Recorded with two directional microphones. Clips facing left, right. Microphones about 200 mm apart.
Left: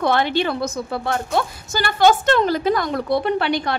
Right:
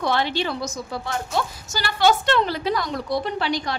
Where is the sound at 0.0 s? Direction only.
55° left (ahead or behind).